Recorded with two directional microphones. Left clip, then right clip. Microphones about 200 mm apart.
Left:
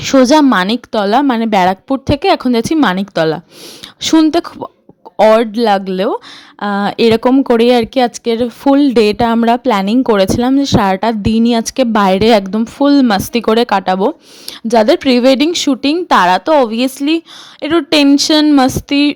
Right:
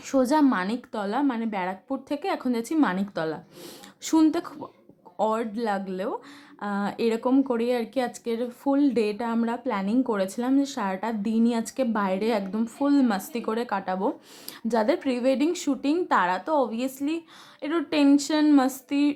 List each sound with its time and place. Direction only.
0.0 s speech: 40° left (ahead or behind)